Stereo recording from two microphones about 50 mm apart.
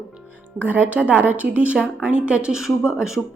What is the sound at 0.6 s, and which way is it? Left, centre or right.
Speech, right.